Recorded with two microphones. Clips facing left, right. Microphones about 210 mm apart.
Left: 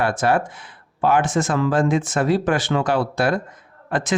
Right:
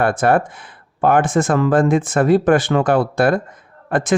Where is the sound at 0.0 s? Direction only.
55° right (ahead or behind).